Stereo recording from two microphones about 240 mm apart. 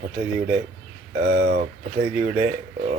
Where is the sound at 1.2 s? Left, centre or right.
Right.